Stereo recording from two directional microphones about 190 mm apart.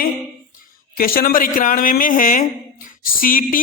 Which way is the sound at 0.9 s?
50° left (ahead or behind).